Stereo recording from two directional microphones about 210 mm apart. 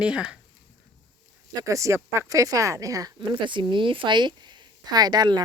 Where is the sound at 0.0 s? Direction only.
5° right (ahead or behind).